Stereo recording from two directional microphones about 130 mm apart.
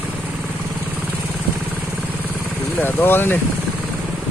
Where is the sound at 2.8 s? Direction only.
15° left (ahead or behind).